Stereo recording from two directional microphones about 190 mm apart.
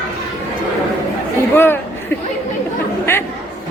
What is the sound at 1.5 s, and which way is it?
Speech, 10° left (ahead or behind).